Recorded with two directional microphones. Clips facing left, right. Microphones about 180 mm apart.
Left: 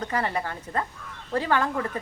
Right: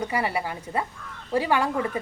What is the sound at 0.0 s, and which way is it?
A woman's voice, 10° right (ahead or behind).